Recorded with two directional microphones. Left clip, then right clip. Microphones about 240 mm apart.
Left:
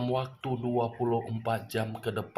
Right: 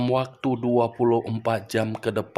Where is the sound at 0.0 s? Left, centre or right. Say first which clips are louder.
Right 8 dB; right.